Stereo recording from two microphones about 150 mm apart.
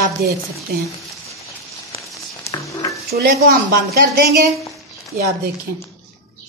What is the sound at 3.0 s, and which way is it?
Speech, 90° right.